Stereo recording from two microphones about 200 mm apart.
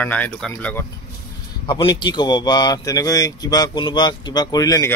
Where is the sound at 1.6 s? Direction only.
20° left (ahead or behind).